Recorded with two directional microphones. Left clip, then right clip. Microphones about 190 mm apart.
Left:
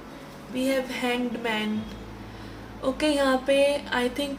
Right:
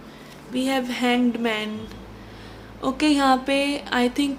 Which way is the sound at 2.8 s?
45° right (ahead or behind).